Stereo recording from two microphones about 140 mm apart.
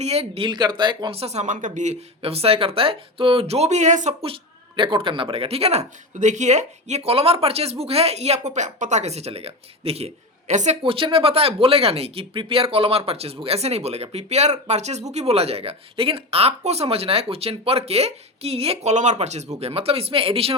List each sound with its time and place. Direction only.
0.0 s speech: 50° right (ahead or behind)
4.8 s speech: 35° right (ahead or behind); by 10.8 s 55° right (ahead or behind)
10.8 s speech: 40° right (ahead or behind)